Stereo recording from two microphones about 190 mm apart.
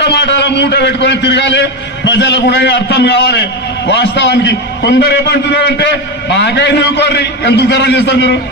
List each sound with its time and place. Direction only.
0.1 s a man's voice: 65° left (ahead or behind)